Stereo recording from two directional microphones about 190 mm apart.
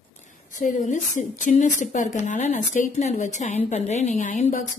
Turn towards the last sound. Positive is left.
turn(degrees=40)  # may be behind; listen again after turning